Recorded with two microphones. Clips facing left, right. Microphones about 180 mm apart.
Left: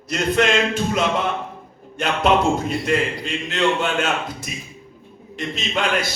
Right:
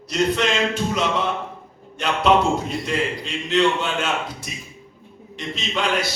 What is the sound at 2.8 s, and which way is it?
A man's voice, 50° left (ahead or behind).